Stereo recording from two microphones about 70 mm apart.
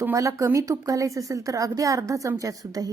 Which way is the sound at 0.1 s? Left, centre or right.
Right.